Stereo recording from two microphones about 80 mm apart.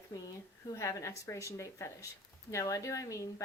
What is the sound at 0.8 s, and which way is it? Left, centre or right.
A woman's voice, left.